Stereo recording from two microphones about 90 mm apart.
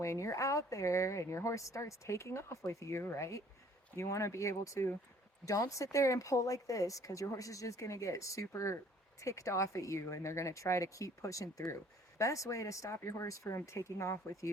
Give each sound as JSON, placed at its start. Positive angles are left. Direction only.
{"t": 0.0, "sound": "speech", "side_deg": 35}